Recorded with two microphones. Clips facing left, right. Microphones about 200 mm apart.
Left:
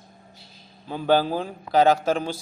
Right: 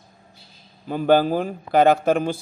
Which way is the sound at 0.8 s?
50° right (ahead or behind).